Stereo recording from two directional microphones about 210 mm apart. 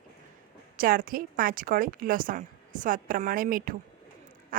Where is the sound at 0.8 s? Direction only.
45° right (ahead or behind).